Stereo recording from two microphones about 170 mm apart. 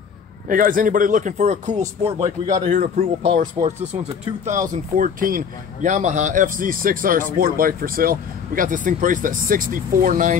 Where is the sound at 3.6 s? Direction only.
25° right (ahead or behind).